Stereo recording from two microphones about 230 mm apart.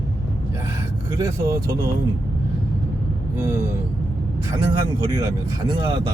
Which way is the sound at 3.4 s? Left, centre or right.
Centre.